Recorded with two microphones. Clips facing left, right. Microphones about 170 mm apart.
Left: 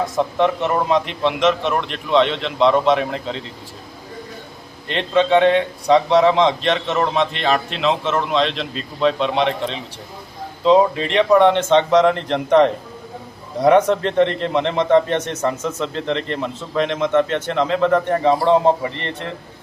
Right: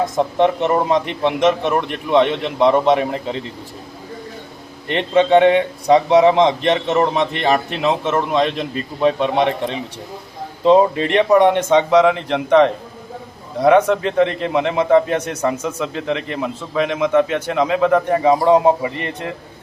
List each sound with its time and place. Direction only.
0.2 s a man's voice: 20° right (ahead or behind)
4.9 s a man's voice: 15° right (ahead or behind)
10.9 s speech: 55° right (ahead or behind)
11.2 s a man's voice: 15° right (ahead or behind)